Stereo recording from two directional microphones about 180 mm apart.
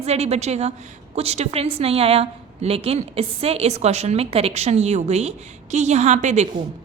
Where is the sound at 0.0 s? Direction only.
35° right (ahead or behind).